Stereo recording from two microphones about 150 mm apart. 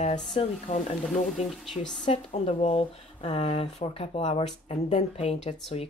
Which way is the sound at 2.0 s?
45° left (ahead or behind).